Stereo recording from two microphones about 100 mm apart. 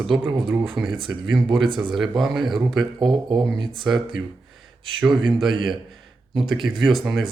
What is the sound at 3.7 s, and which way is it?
Speech, centre (ahead or behind).